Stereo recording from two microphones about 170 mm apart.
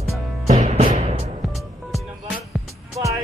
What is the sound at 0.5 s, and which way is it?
Music, 40° right (ahead or behind).